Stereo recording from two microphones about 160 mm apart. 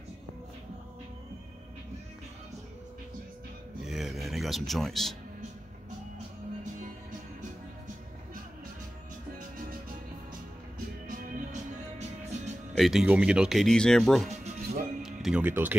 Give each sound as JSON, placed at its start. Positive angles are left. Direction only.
{"t": 3.8, "sound": "a sound", "side_deg": 0}
{"t": 6.1, "sound": "music", "side_deg": -50}
{"t": 11.1, "sound": "music", "side_deg": -50}
{"t": 12.7, "sound": "speech", "side_deg": 0}
{"t": 15.0, "sound": "music", "side_deg": 0}